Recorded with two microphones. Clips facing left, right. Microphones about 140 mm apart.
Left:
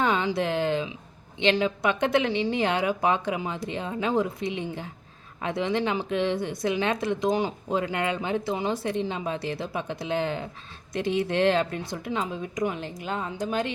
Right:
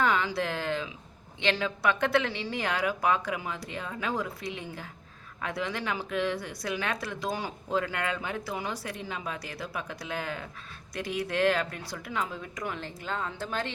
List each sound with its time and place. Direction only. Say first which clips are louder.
0.0 s speech: left 3 dB; 20° left (ahead or behind)